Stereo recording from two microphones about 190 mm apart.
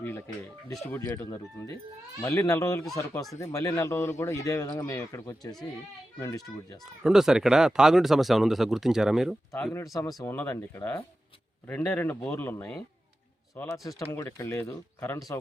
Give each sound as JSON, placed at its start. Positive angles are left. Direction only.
{"t": 0.0, "sound": "a man's voice", "side_deg": 15}
{"t": 7.0, "sound": "speech", "side_deg": 0}
{"t": 9.9, "sound": "a man's voice", "side_deg": 15}
{"t": 14.0, "sound": "a man's voice", "side_deg": 15}